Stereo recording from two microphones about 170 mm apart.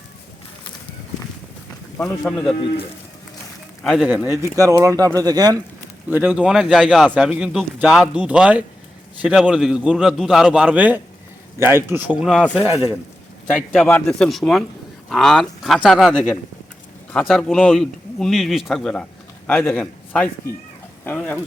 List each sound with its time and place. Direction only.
2.0 s speech: centre (ahead or behind)
3.8 s speech: centre (ahead or behind)
4.4 s speech: 20° right (ahead or behind)
6.1 s speech: 10° right (ahead or behind)
13.5 s a man's voice: 5° left (ahead or behind)
21.0 s chicken: 10° left (ahead or behind)